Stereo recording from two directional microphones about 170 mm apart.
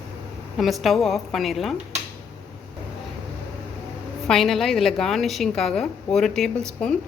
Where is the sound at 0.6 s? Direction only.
Centre (ahead or behind).